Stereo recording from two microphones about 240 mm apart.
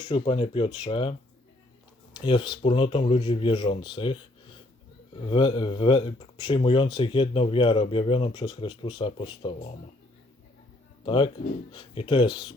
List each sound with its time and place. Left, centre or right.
0.0 s speech: left
2.1 s speech: centre
5.3 s speech: centre
11.0 s speech: left